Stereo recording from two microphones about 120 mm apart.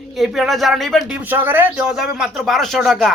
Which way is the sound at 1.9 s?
5° right (ahead or behind).